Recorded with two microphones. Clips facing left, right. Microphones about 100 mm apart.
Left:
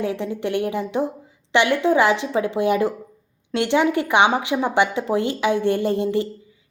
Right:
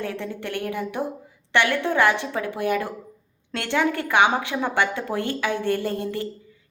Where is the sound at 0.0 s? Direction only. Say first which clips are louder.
Left 6 dB; 15° left (ahead or behind).